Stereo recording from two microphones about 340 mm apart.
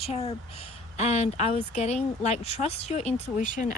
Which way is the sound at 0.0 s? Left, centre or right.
Centre.